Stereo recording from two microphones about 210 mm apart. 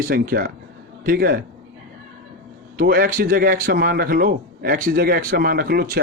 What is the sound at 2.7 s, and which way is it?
A man's voice, 45° right (ahead or behind).